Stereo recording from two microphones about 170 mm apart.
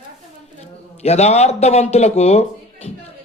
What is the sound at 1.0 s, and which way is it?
Speech, 40° left (ahead or behind).